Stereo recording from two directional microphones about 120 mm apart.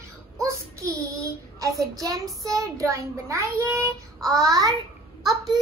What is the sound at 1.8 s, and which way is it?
A child's voice, 25° right (ahead or behind).